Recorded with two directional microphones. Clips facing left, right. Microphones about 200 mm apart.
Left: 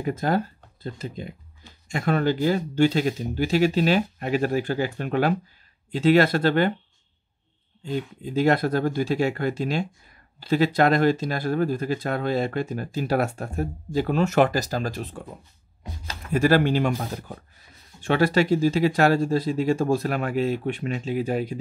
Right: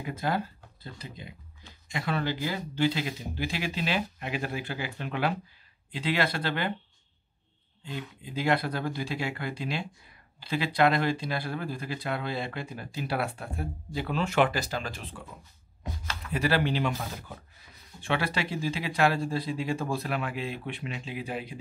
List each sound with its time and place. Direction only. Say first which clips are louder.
0.0 s speech: left 6 dB; 45° left (ahead or behind)
7.8 s speech: left 10 dB; 45° left (ahead or behind)